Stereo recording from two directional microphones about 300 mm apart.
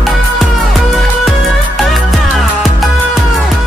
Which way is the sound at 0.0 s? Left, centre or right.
Centre.